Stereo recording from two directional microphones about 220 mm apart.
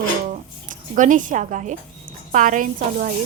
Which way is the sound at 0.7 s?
35° right (ahead or behind).